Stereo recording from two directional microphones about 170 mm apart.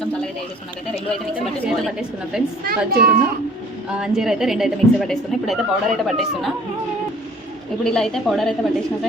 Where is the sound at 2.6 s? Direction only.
65° right (ahead or behind).